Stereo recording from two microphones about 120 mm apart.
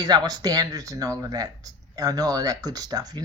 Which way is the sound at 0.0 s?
35° right (ahead or behind).